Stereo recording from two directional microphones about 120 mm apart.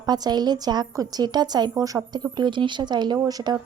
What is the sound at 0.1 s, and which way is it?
Speech, 35° right (ahead or behind).